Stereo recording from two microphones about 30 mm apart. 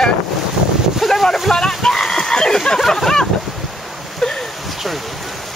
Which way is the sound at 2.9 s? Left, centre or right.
Centre.